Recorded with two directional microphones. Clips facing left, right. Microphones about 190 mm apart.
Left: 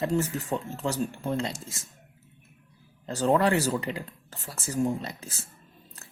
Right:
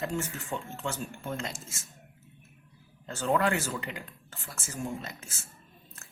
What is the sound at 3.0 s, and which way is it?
Speech, 35° left (ahead or behind).